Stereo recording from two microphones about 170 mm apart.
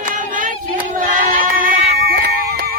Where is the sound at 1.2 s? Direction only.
55° right (ahead or behind).